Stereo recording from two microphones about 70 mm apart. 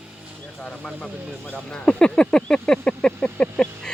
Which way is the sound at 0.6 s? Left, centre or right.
Centre.